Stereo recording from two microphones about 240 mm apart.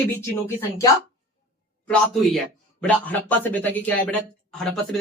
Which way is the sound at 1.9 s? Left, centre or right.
Centre.